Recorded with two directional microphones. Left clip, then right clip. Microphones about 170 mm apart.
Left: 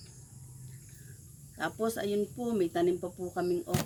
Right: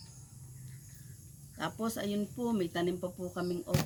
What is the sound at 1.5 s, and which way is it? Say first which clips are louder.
Speech: left 4 dB; 25° right (ahead or behind).